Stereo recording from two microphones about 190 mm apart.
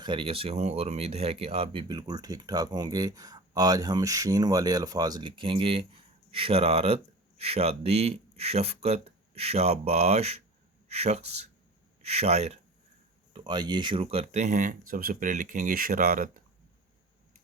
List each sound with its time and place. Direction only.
0.0 s speech: 25° right (ahead or behind)
13.3 s speech: 25° right (ahead or behind); by 16.4 s 50° right (ahead or behind)